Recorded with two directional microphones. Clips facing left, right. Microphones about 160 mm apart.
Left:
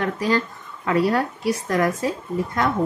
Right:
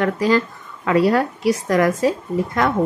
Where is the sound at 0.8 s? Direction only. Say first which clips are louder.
Right 4 dB; 90° right.